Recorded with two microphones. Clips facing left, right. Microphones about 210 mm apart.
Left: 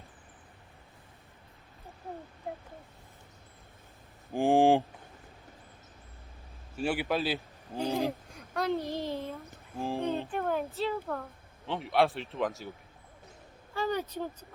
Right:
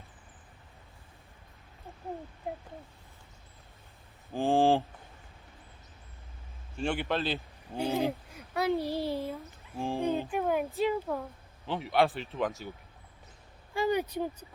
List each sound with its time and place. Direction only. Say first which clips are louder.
4.4 s a man's voice: left 2 dB; 15° left (ahead or behind)
6.7 s a man's voice: left 1 dB; 5° left (ahead or behind); by 9.3 s 10° right (ahead or behind)
9.7 s a man's voice: right 1 dB; centre (ahead or behind)
10.1 s speech: right 2 dB; 10° right (ahead or behind)
11.6 s a man's voice: even; centre (ahead or behind)
13.7 s speech: right 3 dB; 10° right (ahead or behind)